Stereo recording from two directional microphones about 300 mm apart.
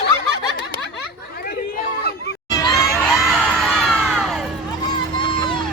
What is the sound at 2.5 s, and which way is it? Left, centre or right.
Crowd, centre.